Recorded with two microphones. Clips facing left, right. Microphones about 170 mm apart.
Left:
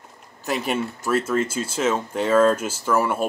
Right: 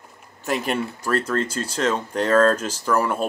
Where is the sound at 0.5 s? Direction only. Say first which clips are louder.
Even; 5° left (ahead or behind).